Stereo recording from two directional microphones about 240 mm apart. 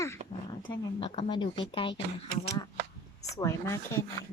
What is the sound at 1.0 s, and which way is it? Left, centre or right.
Speech, left.